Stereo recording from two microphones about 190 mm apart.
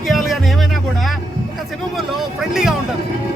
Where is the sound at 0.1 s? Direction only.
Centre (ahead or behind).